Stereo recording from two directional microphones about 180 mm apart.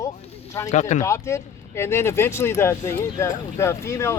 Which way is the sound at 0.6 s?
40° left (ahead or behind).